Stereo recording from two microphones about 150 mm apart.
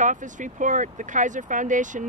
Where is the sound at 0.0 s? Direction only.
55° right (ahead or behind).